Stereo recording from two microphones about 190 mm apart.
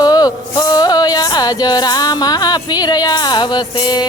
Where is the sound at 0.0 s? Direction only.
20° left (ahead or behind).